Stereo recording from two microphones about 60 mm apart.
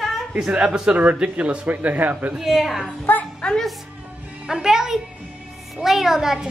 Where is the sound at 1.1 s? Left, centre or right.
Centre.